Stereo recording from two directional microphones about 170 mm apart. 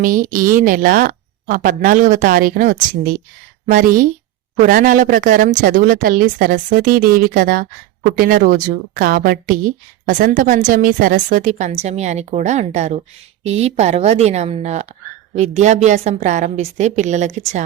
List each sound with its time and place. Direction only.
0.0 s a woman's voice: 50° right (ahead or behind)